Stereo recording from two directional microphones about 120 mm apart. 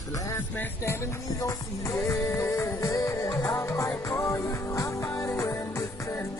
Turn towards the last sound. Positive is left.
turn(degrees=25)  # may be behind; listen again after turning